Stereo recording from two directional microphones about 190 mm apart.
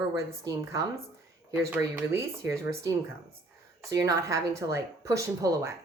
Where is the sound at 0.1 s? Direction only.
15° right (ahead or behind).